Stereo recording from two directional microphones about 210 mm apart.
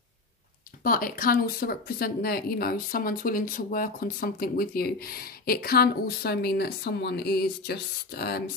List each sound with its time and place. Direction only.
0.8 s speech: 40° left (ahead or behind)